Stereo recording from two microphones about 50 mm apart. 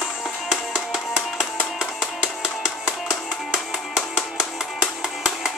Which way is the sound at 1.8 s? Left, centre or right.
Centre.